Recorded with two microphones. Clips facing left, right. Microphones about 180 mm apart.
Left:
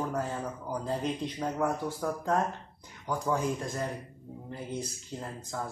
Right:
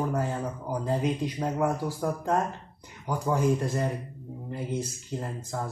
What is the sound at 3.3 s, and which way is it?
Speech, 10° right (ahead or behind).